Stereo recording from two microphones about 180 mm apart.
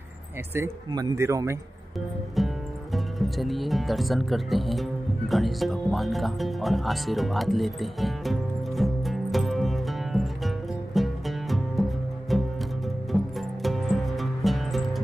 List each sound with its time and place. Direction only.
0.6 s speech: 20° right (ahead or behind)
2.3 s speech: centre (ahead or behind)
5.3 s music: centre (ahead or behind)